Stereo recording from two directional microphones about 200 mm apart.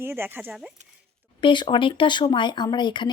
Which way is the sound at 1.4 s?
25° left (ahead or behind).